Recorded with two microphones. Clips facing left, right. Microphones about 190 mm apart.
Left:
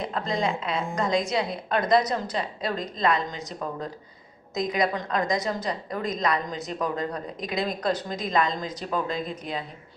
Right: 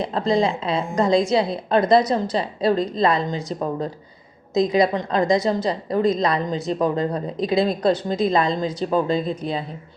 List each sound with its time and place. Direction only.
0.0 s a woman's voice: 30° right (ahead or behind)